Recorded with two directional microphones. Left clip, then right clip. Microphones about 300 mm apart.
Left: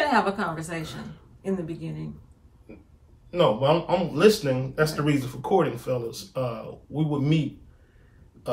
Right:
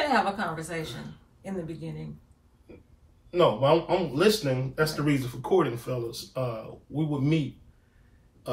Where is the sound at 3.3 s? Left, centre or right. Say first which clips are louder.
Left 1 dB; centre.